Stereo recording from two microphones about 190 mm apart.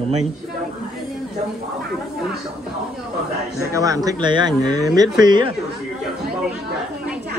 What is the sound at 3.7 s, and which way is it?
Speech, 15° right (ahead or behind).